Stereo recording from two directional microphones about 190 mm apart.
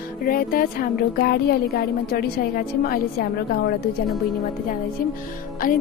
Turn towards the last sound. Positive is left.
turn(degrees=45)  # may be behind; listen again after turning